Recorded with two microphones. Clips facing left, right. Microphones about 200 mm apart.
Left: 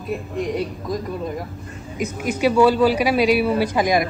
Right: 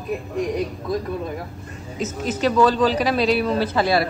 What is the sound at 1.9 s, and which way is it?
A man's voice, 10° left (ahead or behind).